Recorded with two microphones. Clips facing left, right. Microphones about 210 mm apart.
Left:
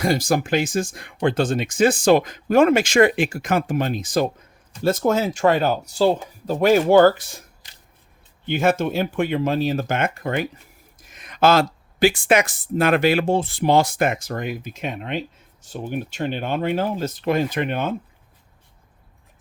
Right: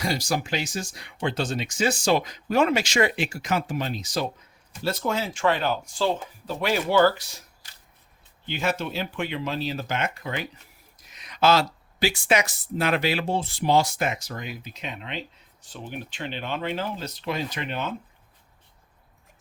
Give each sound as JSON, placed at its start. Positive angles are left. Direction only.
{"t": 0.0, "sound": "speech", "side_deg": 50}
{"t": 8.4, "sound": "speech", "side_deg": 50}